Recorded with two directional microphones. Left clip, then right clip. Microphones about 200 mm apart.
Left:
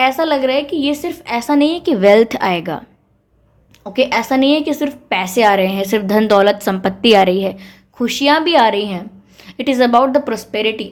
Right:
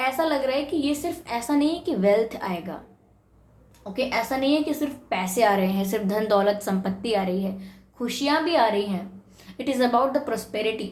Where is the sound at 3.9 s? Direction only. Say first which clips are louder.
Left 11 dB; 50° left (ahead or behind).